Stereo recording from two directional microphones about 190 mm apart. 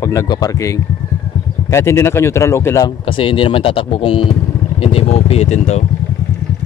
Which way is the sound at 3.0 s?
30° left (ahead or behind).